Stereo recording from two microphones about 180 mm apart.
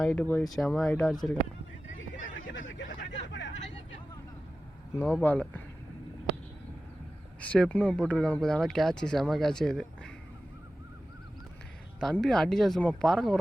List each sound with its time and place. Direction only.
0.0 s speech: 10° left (ahead or behind)
2.0 s a sound: 90° left
4.9 s speech: 5° left (ahead or behind)
7.4 s speech: 5° left (ahead or behind)
11.9 s speech: 5° left (ahead or behind)